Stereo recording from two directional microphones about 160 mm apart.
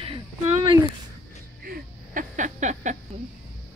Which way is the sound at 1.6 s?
55° right (ahead or behind).